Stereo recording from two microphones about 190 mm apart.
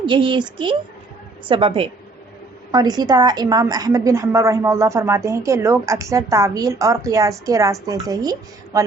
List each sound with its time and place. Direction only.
0.0 s a woman's voice: 25° right (ahead or behind)